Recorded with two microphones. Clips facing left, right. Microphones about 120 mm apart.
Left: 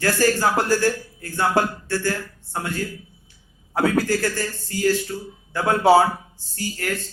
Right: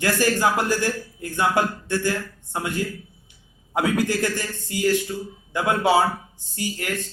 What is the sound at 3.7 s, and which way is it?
Speech, 20° right (ahead or behind).